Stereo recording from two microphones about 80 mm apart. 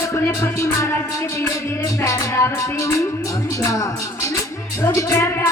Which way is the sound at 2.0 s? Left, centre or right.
Left.